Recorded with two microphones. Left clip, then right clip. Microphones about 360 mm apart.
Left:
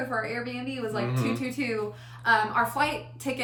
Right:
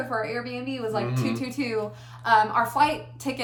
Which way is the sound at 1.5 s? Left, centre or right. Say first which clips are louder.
Right 2 dB; centre.